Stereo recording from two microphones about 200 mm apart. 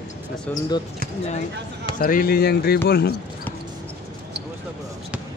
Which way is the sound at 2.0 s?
45° left (ahead or behind).